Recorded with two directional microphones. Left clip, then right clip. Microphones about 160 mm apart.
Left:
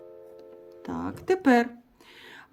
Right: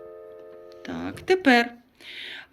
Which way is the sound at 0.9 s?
55° left (ahead or behind).